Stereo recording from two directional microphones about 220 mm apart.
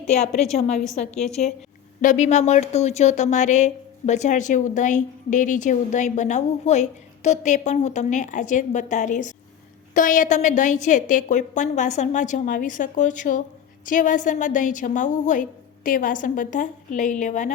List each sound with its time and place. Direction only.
0.1 s speech: 30° left (ahead or behind)
1.1 s a woman's voice: centre (ahead or behind)
2.0 s speech: 35° left (ahead or behind)